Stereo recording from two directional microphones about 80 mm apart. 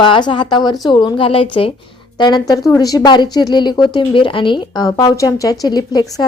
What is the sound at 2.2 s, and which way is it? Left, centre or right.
A woman's voice, left.